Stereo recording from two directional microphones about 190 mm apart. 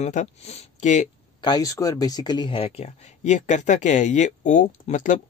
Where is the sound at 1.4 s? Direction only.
20° left (ahead or behind); by 5.1 s 40° left (ahead or behind).